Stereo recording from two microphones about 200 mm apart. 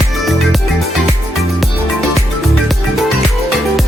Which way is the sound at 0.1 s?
Centre (ahead or behind).